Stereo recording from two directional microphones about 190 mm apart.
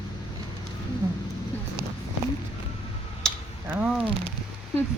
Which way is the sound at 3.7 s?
5° right (ahead or behind).